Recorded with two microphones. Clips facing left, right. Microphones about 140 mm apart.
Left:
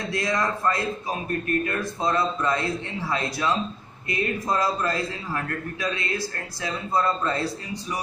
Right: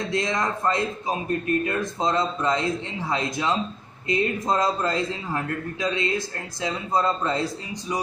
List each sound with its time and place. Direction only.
0.1 s a man's voice: 20° right (ahead or behind)